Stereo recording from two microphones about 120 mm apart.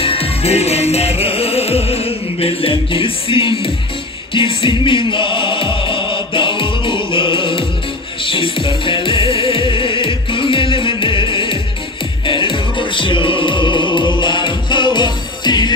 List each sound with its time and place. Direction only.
0.0 s music: 50° left (ahead or behind); by 15.7 s 35° left (ahead or behind)